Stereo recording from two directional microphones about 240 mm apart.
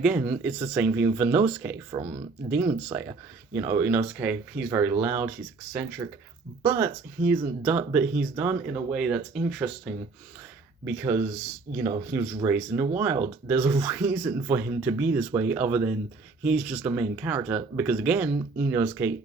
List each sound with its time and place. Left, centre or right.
0.0 s speech: centre